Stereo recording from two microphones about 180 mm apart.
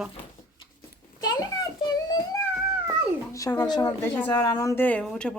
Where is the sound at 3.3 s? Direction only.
20° left (ahead or behind).